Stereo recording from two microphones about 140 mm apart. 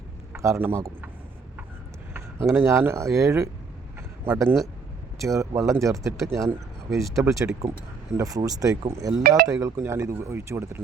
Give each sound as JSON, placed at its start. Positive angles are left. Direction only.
{"t": 0.3, "sound": "speech", "side_deg": -20}
{"t": 2.1, "sound": "speech", "side_deg": -15}